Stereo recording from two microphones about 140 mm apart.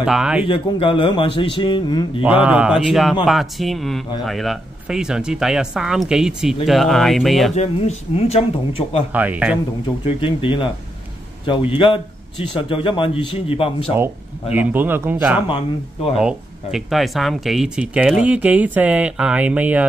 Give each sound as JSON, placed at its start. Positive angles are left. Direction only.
{"t": 0.0, "sound": "speech", "side_deg": -5}
{"t": 0.5, "sound": "a man's voice", "side_deg": 40}
{"t": 2.2, "sound": "speech", "side_deg": -10}
{"t": 7.5, "sound": "speech", "side_deg": 50}
{"t": 9.1, "sound": "speech", "side_deg": -10}
{"t": 10.0, "sound": "a man's voice", "side_deg": 40}
{"t": 14.5, "sound": "speech", "side_deg": -15}
{"t": 15.5, "sound": "speech", "side_deg": 40}
{"t": 16.2, "sound": "speech", "side_deg": -5}